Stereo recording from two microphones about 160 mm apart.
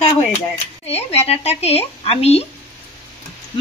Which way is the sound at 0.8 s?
40° left (ahead or behind).